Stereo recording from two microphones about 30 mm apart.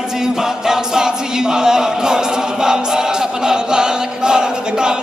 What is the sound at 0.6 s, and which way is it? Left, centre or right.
Choir, right.